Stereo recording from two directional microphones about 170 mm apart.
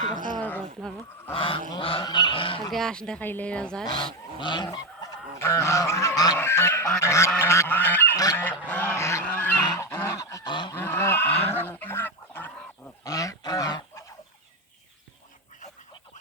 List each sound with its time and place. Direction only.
0.1 s a sound: 50° right (ahead or behind)
0.3 s a sound: 10° left (ahead or behind)
1.3 s goose: 30° left (ahead or behind)
2.7 s speech: 5° left (ahead or behind)
4.4 s goose: 25° left (ahead or behind)
10.8 s goose: 15° left (ahead or behind)